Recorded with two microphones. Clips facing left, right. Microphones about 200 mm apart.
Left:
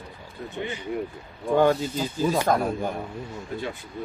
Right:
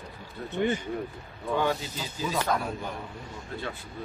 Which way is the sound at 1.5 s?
45° left (ahead or behind).